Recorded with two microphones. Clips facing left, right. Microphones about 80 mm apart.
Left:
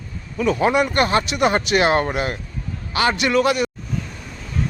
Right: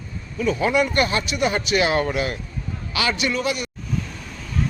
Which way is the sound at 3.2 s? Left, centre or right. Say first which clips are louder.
Left 6 dB; left.